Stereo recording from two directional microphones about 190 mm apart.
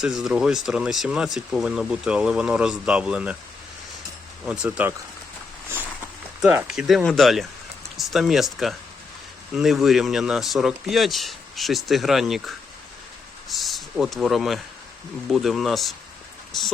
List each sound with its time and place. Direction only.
0.0 s speech: centre (ahead or behind)
4.4 s speech: 5° right (ahead or behind)
6.4 s speech: 10° right (ahead or behind)